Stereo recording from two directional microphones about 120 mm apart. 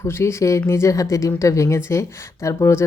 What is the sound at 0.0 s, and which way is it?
Speech, 20° left (ahead or behind).